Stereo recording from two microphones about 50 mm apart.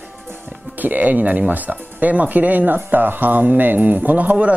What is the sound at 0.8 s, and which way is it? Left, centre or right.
Speech, right.